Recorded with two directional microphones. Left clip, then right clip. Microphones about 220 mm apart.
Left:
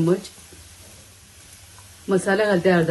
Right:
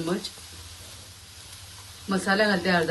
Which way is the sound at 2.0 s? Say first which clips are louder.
Left 4 dB; 30° left (ahead or behind).